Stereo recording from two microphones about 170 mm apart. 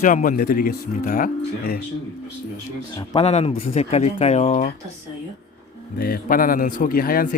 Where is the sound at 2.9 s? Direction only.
25° left (ahead or behind).